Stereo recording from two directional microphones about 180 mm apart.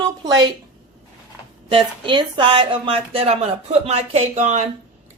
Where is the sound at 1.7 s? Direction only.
30° right (ahead or behind).